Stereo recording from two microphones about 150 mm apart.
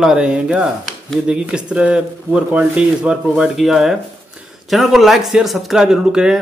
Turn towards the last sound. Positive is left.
turn(degrees=-5)  # may be behind; listen again after turning